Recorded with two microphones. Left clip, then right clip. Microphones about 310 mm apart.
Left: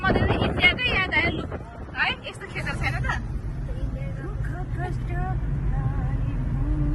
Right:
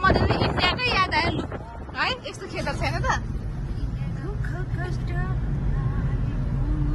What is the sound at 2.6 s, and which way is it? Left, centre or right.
Vehicle, centre.